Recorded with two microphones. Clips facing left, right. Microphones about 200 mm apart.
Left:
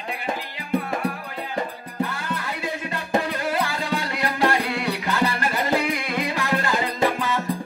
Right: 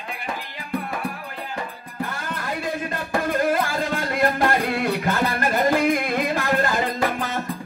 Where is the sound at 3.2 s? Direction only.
50° right (ahead or behind).